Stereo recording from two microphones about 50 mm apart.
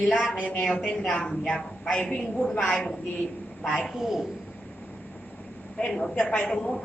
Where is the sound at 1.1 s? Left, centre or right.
Centre.